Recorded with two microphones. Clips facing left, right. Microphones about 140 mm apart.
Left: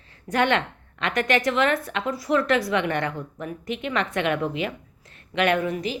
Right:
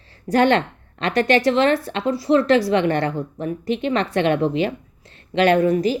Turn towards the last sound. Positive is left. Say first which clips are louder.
# right 7 dB
turn(degrees=-40)  # may be behind; listen again after turning